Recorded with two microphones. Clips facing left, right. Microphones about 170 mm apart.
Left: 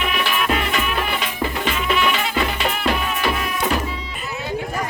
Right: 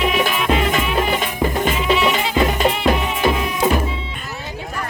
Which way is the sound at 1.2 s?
45° right (ahead or behind).